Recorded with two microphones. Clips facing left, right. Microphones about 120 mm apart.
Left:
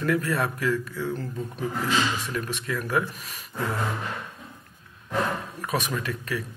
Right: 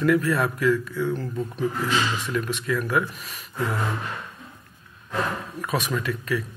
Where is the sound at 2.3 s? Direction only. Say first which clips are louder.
Right 4 dB; 40° left (ahead or behind).